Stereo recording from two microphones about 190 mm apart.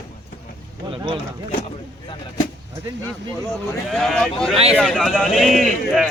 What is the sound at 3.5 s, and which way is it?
A man's voice, centre (ahead or behind).